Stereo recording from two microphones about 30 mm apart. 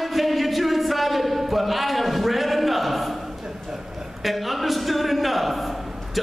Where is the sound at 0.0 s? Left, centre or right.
Centre.